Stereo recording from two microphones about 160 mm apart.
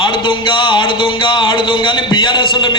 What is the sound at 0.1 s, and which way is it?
Speech, 30° left (ahead or behind).